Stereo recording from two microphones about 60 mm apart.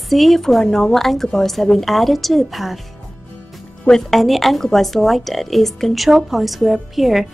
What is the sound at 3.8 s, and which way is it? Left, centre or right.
A woman's voice, centre.